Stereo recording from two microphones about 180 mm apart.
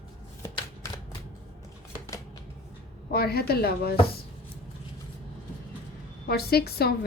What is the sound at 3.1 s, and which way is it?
Speech, 60° left (ahead or behind).